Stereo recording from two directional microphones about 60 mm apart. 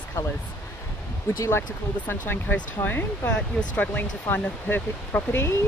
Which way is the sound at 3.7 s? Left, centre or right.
Left.